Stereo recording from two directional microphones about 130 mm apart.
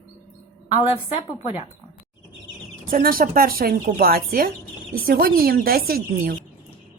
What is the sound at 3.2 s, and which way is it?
Speech, 90° right.